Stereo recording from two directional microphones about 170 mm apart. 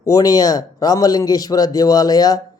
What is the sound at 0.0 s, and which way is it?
A man's voice, 20° left (ahead or behind).